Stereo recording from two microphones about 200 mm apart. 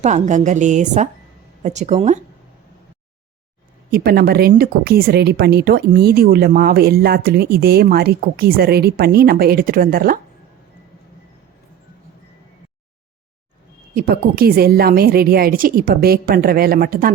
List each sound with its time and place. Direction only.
0.0 s a woman's voice: 35° right (ahead or behind)
3.9 s a woman's voice: 50° right (ahead or behind)
13.9 s a woman's voice: 50° right (ahead or behind)